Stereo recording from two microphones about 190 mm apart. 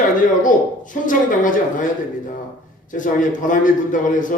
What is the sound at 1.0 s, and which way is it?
Speech, 45° left (ahead or behind).